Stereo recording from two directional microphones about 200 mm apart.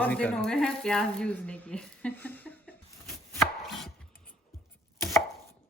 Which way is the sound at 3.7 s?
Centre (ahead or behind).